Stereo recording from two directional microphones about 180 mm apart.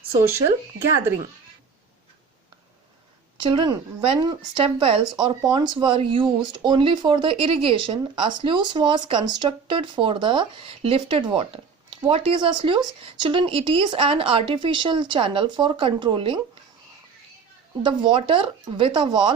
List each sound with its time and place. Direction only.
3.4 s speech: 25° right (ahead or behind)
17.8 s speech: 30° right (ahead or behind)